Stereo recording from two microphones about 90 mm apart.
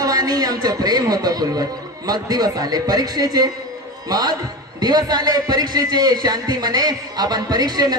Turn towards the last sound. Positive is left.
turn(degrees=-45)  # may be behind; listen again after turning